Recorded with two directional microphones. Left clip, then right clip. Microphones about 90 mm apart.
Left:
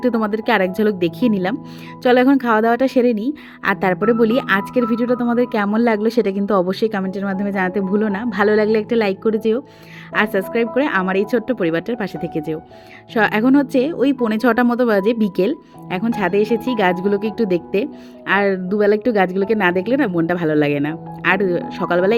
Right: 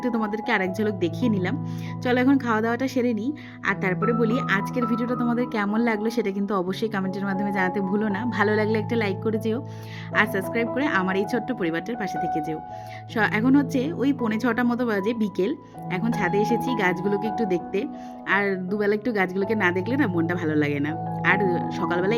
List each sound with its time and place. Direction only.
0.0 s a woman's voice: 50° left (ahead or behind)
7.1 s a woman's voice: 35° left (ahead or behind); by 17.8 s 55° left (ahead or behind)
18.3 s a woman's voice: 40° left (ahead or behind)